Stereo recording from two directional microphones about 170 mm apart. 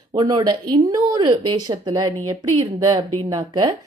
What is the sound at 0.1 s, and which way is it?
A woman's voice, 25° right (ahead or behind).